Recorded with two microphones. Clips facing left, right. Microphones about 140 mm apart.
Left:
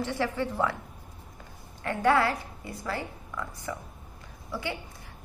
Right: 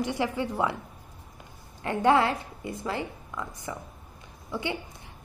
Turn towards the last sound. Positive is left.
turn(degrees=-20)  # may be behind; listen again after turning